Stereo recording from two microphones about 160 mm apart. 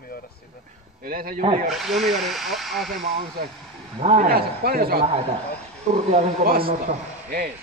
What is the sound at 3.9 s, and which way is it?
Speech, 40° right (ahead or behind).